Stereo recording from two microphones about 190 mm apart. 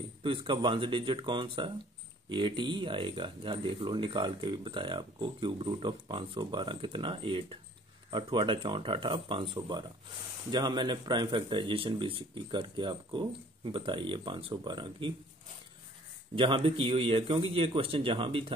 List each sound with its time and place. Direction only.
0.2 s speech: 25° right (ahead or behind)
16.3 s speech: 30° right (ahead or behind)